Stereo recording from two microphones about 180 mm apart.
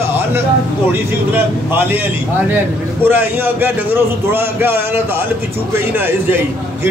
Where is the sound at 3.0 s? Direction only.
10° right (ahead or behind).